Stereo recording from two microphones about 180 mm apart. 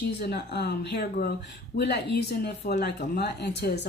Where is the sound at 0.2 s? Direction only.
65° left (ahead or behind).